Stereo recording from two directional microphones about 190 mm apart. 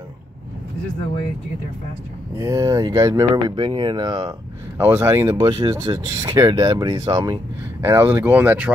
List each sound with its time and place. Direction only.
2.3 s speech: 15° right (ahead or behind)
4.7 s speech: 10° right (ahead or behind)